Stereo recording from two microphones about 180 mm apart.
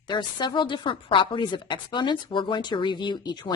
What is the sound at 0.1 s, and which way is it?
A woman's voice, 25° left (ahead or behind).